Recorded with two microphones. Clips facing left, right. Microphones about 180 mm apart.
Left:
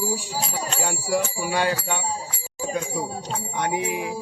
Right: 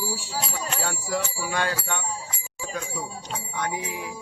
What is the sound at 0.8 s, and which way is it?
Bicycle bell, 15° left (ahead or behind).